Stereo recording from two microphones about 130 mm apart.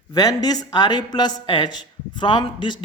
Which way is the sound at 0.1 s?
30° left (ahead or behind).